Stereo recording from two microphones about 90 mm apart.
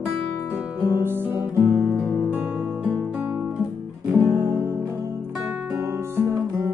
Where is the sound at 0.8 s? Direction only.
25° right (ahead or behind).